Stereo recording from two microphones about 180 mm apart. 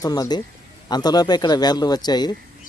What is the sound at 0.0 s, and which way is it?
A man's voice, 20° left (ahead or behind).